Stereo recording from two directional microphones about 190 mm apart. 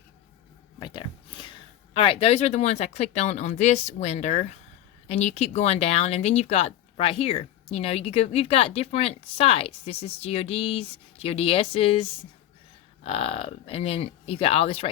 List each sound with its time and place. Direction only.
0.8 s speech: 25° left (ahead or behind)